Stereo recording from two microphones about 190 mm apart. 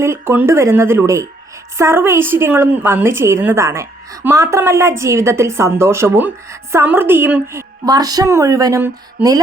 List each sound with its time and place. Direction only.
0.0 s a woman's voice: 15° right (ahead or behind)
7.9 s speech: 20° right (ahead or behind)